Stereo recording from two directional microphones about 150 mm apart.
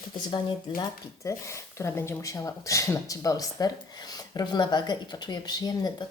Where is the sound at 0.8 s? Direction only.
20° left (ahead or behind).